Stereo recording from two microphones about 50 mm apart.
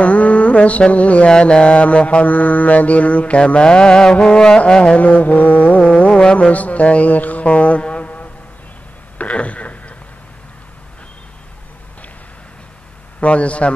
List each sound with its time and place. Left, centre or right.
0.0 s mantra: left
6.3 s speech: left
9.2 s a sound: left
13.2 s mantra: left